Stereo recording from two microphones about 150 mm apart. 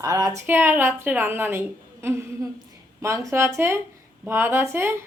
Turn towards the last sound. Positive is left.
turn(degrees=-15)  # may be behind; listen again after turning